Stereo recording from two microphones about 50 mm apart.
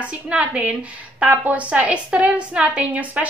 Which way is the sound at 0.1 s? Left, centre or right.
Right.